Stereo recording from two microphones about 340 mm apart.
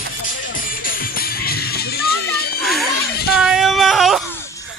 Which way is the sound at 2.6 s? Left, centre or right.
Centre.